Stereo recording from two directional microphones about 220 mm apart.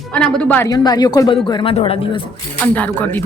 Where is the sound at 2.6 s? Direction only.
5° left (ahead or behind).